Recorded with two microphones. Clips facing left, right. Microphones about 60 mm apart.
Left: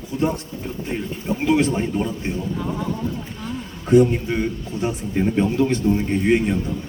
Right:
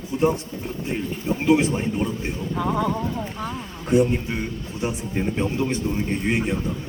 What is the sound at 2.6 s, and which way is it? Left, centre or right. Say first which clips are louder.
Speech: right 3 dB; right.